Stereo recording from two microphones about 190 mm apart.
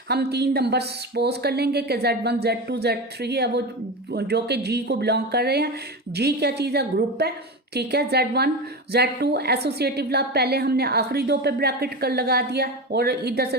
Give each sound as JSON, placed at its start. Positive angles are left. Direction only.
{"t": 0.1, "sound": "a woman's voice", "side_deg": -60}